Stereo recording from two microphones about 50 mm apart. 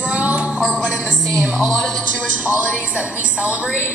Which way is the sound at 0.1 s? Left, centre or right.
Right.